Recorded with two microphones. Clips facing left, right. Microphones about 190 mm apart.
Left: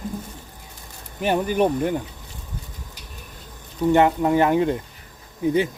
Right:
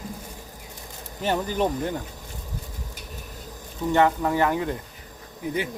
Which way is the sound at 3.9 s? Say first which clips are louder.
Left 3 dB; 20° left (ahead or behind).